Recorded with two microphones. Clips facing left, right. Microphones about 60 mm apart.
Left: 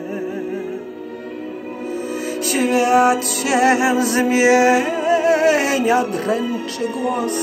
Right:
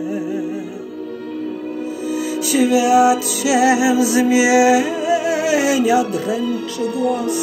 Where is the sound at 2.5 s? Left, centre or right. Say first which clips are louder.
Right 2 dB; left.